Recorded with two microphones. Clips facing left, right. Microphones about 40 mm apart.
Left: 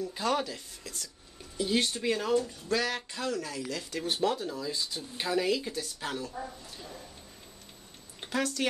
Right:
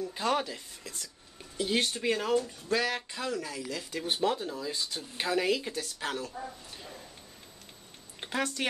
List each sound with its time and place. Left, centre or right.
0.0 s speech: right
2.0 s speech: centre
4.7 s speech: right
8.2 s speech: right